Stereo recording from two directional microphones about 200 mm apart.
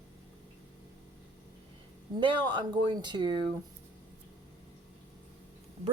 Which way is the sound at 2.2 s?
25° right (ahead or behind).